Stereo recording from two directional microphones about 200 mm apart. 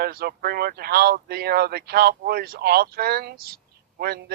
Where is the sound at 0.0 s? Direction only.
50° right (ahead or behind).